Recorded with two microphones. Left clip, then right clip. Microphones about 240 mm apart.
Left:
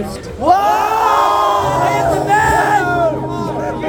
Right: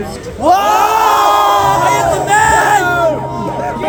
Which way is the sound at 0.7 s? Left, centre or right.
Right.